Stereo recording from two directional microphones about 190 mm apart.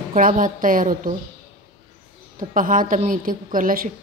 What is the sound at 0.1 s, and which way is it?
A woman's voice, 45° right (ahead or behind).